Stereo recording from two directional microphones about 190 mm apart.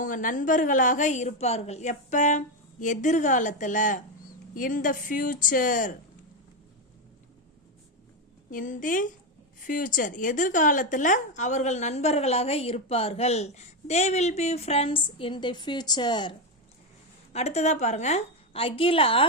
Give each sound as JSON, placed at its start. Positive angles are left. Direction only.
{"t": 0.0, "sound": "a woman's voice", "side_deg": 45}
{"t": 8.4, "sound": "a woman's voice", "side_deg": 45}
{"t": 17.3, "sound": "a woman's voice", "side_deg": 35}